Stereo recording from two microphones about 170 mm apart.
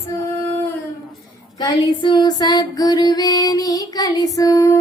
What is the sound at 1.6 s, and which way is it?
Female singing, 25° left (ahead or behind).